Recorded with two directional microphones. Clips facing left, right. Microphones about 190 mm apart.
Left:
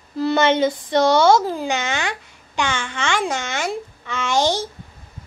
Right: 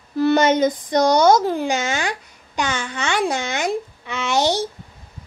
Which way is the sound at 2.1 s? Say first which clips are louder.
Right 1 dB; 40° right (ahead or behind).